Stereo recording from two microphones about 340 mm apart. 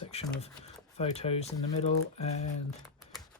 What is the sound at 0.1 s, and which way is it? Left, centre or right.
Speech, centre.